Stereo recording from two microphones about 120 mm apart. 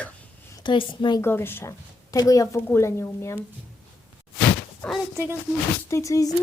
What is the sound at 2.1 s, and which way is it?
Speech, 30° left (ahead or behind).